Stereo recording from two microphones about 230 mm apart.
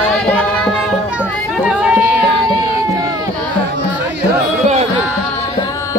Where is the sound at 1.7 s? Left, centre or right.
Centre.